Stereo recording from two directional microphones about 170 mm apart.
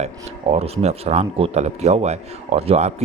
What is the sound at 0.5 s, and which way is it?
Speech, 40° right (ahead or behind).